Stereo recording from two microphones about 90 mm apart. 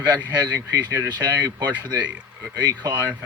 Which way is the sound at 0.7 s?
40° right (ahead or behind).